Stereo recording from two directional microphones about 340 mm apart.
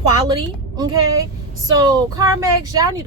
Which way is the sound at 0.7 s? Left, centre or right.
Centre.